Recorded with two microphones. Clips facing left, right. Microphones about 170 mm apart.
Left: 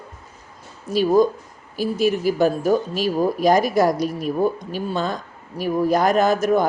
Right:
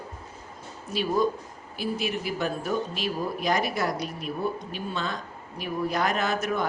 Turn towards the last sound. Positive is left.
turn(degrees=40)  # may be behind; listen again after turning